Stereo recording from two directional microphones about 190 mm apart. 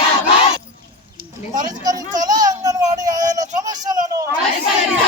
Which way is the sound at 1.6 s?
20° right (ahead or behind).